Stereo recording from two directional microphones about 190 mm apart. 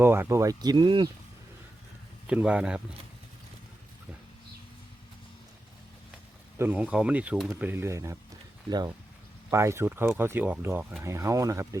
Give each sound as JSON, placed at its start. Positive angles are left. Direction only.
{"t": 0.0, "sound": "speech", "side_deg": -10}
{"t": 2.2, "sound": "speech", "side_deg": -5}
{"t": 6.6, "sound": "speech", "side_deg": -10}
{"t": 9.5, "sound": "speech", "side_deg": -15}